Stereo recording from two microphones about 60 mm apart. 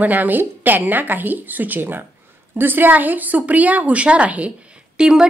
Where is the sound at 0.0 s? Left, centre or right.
Right.